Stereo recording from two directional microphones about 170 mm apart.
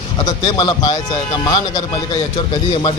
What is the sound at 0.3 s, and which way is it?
A man's voice, 25° left (ahead or behind).